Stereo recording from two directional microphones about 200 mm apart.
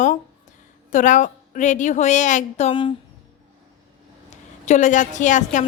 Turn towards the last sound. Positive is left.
turn(degrees=40)  # may be behind; listen again after turning